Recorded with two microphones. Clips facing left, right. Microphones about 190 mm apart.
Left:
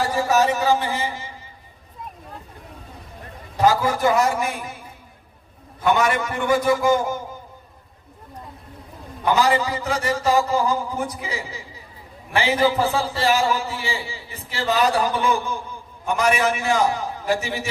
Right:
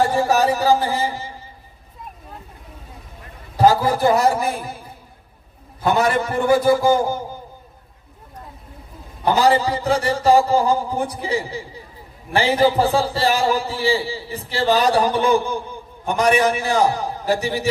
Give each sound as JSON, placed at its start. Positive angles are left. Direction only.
{"t": 0.1, "sound": "a man's voice", "side_deg": -30}
{"t": 3.6, "sound": "a man's voice", "side_deg": -35}
{"t": 5.8, "sound": "a man's voice", "side_deg": -35}
{"t": 9.2, "sound": "a man's voice", "side_deg": -35}